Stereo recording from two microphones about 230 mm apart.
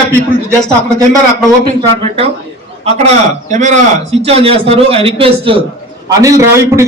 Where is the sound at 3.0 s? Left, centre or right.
Right.